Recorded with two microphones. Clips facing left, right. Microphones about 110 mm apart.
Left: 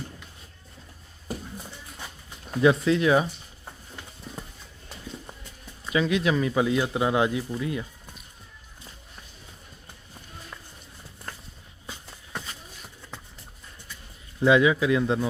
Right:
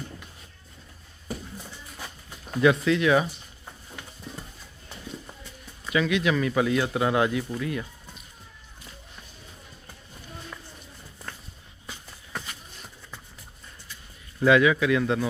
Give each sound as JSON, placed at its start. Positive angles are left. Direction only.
{"t": 2.6, "sound": "speech", "side_deg": 30}
{"t": 5.9, "sound": "speech", "side_deg": 30}
{"t": 6.6, "sound": "speech", "side_deg": 20}
{"t": 14.4, "sound": "speech", "side_deg": 25}